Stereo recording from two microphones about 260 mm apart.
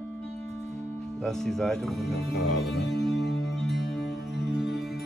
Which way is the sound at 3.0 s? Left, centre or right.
Centre.